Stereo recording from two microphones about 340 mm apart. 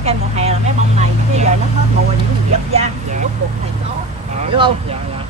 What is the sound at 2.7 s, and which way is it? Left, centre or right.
Speech, centre.